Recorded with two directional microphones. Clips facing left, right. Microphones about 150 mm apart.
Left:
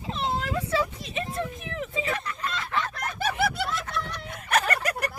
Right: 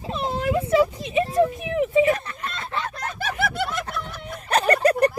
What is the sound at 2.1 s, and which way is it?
Fowl, 30° right (ahead or behind).